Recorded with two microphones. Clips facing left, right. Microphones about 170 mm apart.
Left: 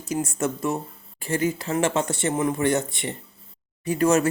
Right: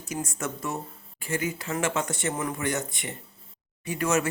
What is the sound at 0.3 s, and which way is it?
Speech, 30° left (ahead or behind).